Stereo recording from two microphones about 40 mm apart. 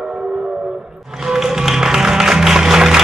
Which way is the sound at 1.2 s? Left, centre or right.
Centre.